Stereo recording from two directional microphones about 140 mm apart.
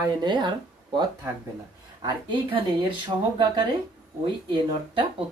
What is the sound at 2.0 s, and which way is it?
Speech, 35° right (ahead or behind).